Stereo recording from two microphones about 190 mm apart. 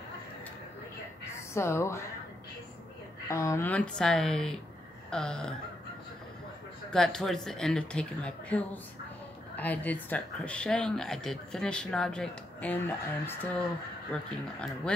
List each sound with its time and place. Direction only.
1.5 s a woman's voice: 15° left (ahead or behind)
3.3 s speech: 15° left (ahead or behind)
6.9 s speech: 5° left (ahead or behind)